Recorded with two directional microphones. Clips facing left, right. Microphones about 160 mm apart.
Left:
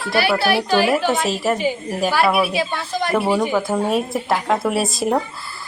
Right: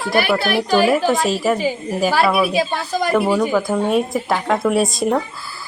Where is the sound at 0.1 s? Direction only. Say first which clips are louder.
Even; 50° right (ahead or behind).